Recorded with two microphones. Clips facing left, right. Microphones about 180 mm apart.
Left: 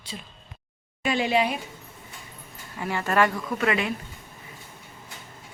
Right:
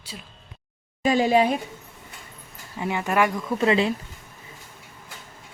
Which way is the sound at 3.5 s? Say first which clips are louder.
Right 7 dB; 25° right (ahead or behind).